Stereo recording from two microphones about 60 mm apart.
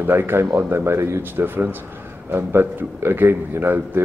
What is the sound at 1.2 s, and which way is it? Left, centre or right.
A man's voice, right.